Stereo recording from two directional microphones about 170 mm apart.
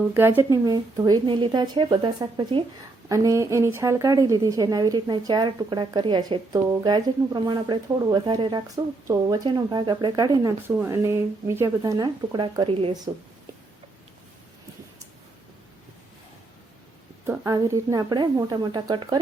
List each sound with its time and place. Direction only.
0.1 s a woman's voice: 10° right (ahead or behind); by 13.0 s 30° right (ahead or behind)
17.2 s a woman's voice: 20° right (ahead or behind)